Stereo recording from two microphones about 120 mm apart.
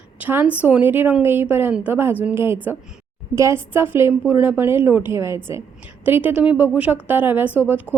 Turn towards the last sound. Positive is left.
turn(degrees=-15)  # may be behind; listen again after turning